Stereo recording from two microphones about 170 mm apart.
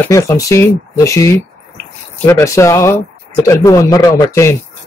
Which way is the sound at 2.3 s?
15° left (ahead or behind).